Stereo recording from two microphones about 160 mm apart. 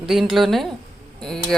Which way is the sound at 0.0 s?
Centre (ahead or behind).